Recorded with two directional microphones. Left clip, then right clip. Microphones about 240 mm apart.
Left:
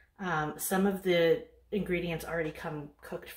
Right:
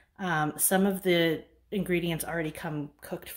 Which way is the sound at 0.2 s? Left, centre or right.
Right.